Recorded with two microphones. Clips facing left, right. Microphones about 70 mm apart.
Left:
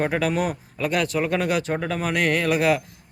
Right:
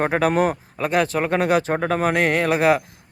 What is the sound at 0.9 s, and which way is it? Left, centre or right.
Speech, right.